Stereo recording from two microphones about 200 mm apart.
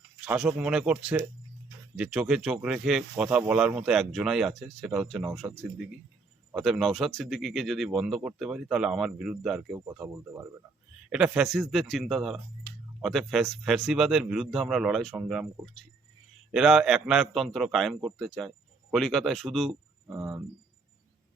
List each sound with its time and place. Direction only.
0.3 s speech: 5° right (ahead or behind)
9.7 s speech: 15° right (ahead or behind)
16.5 s speech: 5° right (ahead or behind)
20.1 s speech: 10° right (ahead or behind)